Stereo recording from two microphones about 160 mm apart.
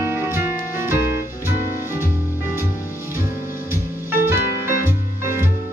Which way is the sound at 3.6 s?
15° right (ahead or behind).